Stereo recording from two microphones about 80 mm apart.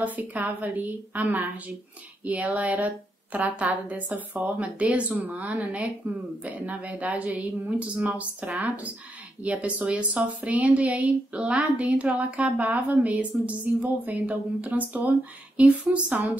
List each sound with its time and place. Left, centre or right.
0.0 s a woman's voice: right